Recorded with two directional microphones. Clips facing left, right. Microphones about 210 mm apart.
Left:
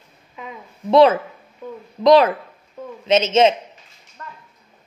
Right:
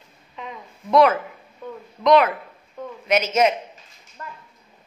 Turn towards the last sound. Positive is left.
turn(degrees=25)  # may be behind; listen again after turning